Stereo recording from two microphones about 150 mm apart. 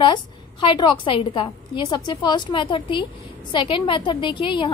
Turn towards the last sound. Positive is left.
turn(degrees=35)  # may be behind; listen again after turning